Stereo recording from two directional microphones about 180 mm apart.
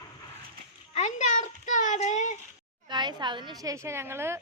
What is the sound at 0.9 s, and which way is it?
A child's voice, 40° left (ahead or behind).